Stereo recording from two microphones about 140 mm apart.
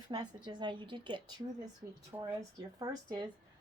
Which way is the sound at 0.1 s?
35° right (ahead or behind).